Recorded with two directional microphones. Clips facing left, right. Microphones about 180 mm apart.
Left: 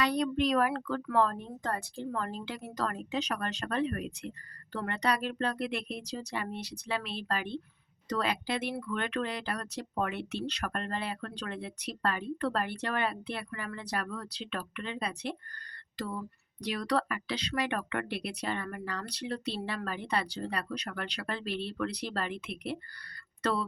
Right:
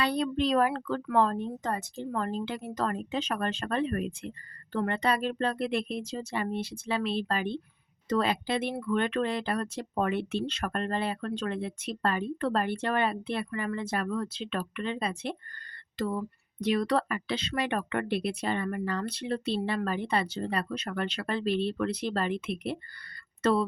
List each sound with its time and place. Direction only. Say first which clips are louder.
0.0 s speech: right 1 dB; 30° right (ahead or behind)